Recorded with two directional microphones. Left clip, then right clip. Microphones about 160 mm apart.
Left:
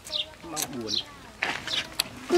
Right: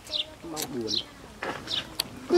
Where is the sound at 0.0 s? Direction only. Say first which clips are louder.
Even; 5° left (ahead or behind).